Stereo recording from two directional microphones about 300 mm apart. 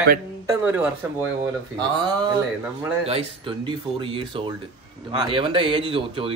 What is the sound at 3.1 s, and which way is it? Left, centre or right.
Speech, centre.